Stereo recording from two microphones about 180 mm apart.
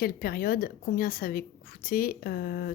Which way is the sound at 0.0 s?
55° left (ahead or behind).